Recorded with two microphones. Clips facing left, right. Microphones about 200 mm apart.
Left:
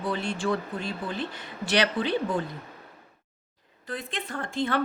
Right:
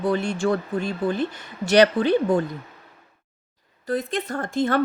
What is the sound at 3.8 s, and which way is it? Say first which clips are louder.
Speech: right 10 dB; 40° right (ahead or behind).